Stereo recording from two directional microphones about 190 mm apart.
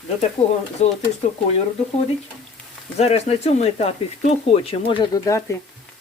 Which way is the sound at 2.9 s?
35° left (ahead or behind).